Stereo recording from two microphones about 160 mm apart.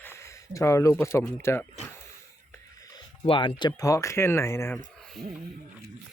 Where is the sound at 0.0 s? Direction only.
15° left (ahead or behind).